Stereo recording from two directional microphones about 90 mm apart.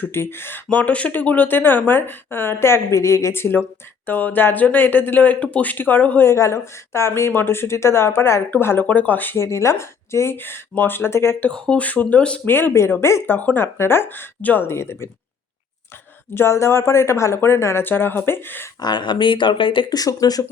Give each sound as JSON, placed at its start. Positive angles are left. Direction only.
{"t": 0.0, "sound": "speech", "side_deg": 25}
{"t": 6.3, "sound": "speech", "side_deg": 30}
{"t": 9.4, "sound": "speech", "side_deg": 35}
{"t": 11.4, "sound": "speech", "side_deg": 10}
{"t": 16.3, "sound": "speech", "side_deg": 30}
{"t": 18.8, "sound": "speech", "side_deg": 55}
{"t": 19.9, "sound": "speech", "side_deg": 40}